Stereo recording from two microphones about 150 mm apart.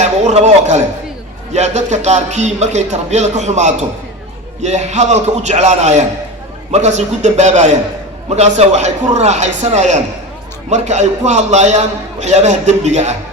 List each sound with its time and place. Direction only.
0.0 s a man's voice: 50° right (ahead or behind)